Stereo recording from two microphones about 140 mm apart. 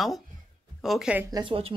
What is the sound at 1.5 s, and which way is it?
Speech, 40° right (ahead or behind).